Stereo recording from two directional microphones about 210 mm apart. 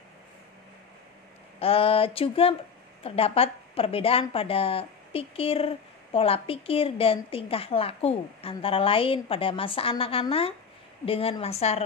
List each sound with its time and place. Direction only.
1.6 s a woman's voice: 25° left (ahead or behind)